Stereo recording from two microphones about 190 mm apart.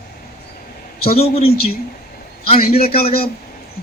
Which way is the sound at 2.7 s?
30° left (ahead or behind).